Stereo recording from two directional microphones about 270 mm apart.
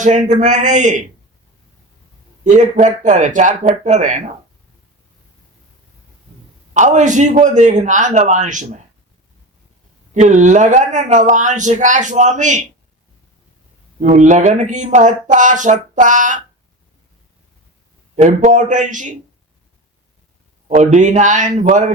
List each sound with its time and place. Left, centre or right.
0.0 s speech: right
2.4 s speech: right
6.7 s speech: right
10.2 s speech: right
14.0 s speech: right
18.2 s speech: right
20.7 s speech: right